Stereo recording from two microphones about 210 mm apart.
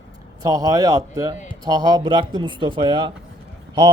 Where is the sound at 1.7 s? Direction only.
20° right (ahead or behind).